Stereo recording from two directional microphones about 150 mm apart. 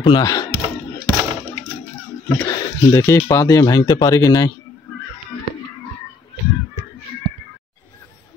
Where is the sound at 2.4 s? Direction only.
25° left (ahead or behind).